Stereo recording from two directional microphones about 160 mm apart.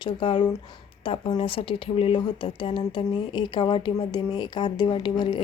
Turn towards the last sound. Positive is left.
turn(degrees=30)  # may be behind; listen again after turning